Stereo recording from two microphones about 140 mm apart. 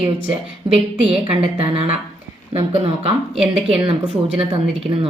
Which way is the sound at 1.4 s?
40° right (ahead or behind).